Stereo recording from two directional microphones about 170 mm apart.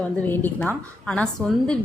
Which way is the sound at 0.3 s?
10° left (ahead or behind).